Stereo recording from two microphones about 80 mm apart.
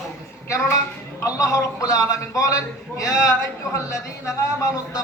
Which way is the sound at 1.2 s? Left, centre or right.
Left.